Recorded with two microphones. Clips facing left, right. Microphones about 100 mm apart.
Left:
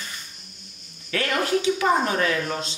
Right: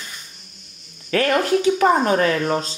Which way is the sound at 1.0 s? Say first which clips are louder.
Right 6 dB; 45° right (ahead or behind).